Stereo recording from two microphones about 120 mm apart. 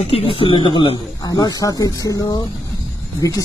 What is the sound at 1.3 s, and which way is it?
Speech, 30° left (ahead or behind).